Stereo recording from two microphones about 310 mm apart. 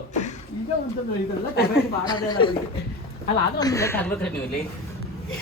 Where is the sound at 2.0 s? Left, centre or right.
Centre.